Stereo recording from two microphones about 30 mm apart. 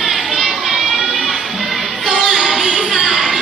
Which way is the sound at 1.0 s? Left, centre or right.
Centre.